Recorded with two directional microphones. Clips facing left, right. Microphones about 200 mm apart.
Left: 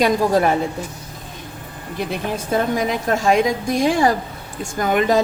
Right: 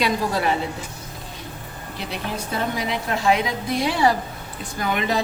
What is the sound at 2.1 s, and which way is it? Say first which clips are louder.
A woman's voice: left 5 dB; 50° left (ahead or behind).